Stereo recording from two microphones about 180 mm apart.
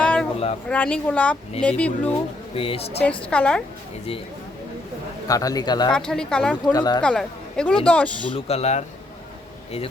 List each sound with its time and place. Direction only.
0.0 s a sound: 5° left (ahead or behind)
0.7 s speech: 5° left (ahead or behind)
2.6 s speech: 30° left (ahead or behind)
3.0 s speech: 5° left (ahead or behind)
5.3 s a man's voice: 20° left (ahead or behind)
5.9 s speech: 5° left (ahead or behind)
6.7 s a man's voice: 20° left (ahead or behind)
7.0 s a woman's voice: 5° left (ahead or behind)
8.3 s speech: 35° left (ahead or behind)